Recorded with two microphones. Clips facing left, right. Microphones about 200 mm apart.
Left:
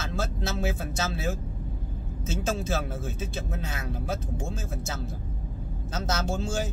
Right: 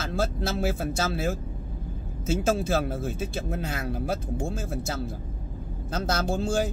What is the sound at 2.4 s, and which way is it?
Speech, 55° right (ahead or behind).